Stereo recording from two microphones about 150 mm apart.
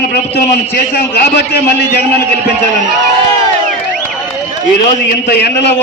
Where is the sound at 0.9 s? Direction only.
90° left.